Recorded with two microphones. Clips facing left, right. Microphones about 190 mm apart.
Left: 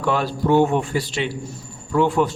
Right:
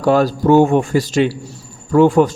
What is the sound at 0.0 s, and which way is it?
A man's voice, 40° right (ahead or behind).